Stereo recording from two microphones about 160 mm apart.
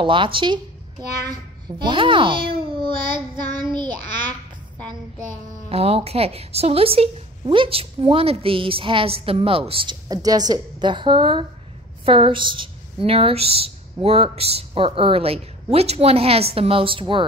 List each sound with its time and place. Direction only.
0.0 s a woman's voice: 30° right (ahead or behind)
1.9 s a child's voice: 30° right (ahead or behind)
5.7 s a woman's voice: 40° right (ahead or behind)
10.0 s a woman's voice: 25° right (ahead or behind)